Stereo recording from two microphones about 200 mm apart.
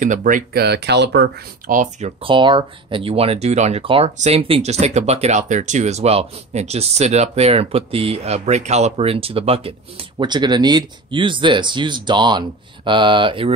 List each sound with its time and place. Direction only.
0.0 s speech: 40° right (ahead or behind); by 1.3 s 60° right (ahead or behind)
1.7 s speech: 35° right (ahead or behind)